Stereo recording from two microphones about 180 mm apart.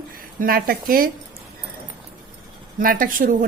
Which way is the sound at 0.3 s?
55° right (ahead or behind).